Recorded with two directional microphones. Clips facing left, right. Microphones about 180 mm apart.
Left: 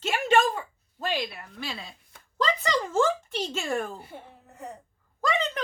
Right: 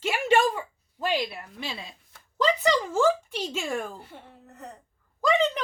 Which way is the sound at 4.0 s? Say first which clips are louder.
Left 2 dB; 10° left (ahead or behind).